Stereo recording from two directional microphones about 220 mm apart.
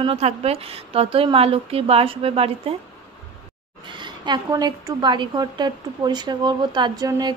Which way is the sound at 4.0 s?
20° right (ahead or behind).